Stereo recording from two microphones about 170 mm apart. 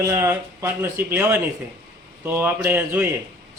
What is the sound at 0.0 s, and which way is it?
Speech, 15° right (ahead or behind).